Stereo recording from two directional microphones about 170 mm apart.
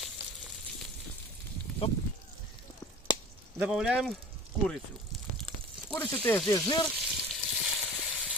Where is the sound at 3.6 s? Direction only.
5° right (ahead or behind).